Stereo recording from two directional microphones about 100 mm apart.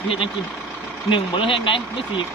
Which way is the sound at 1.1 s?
55° left (ahead or behind).